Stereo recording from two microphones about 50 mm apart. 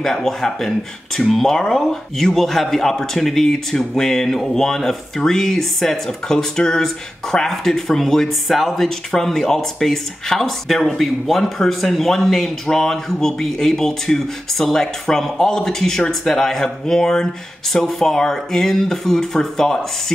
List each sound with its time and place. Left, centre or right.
0.0 s a man's voice: centre